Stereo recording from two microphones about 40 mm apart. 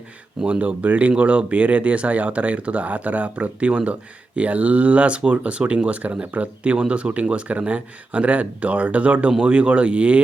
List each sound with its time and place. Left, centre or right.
0.4 s speech: centre
0.8 s speech: right